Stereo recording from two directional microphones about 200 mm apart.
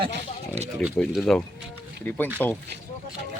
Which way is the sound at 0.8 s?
Centre (ahead or behind).